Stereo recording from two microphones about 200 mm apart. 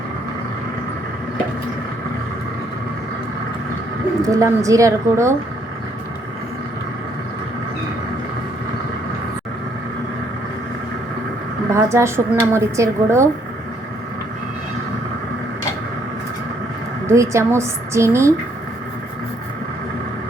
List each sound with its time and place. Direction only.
4.3 s a woman's voice: 15° right (ahead or behind)
11.7 s a woman's voice: 15° right (ahead or behind)
17.1 s a woman's voice: 15° right (ahead or behind)